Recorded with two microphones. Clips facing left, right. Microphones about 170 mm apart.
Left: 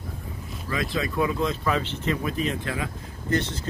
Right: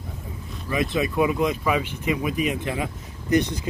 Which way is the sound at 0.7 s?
20° right (ahead or behind).